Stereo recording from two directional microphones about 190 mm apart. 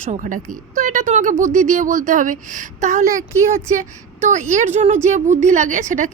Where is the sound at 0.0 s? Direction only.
40° right (ahead or behind).